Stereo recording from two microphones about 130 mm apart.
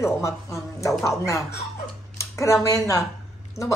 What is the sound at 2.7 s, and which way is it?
Speech, 25° left (ahead or behind).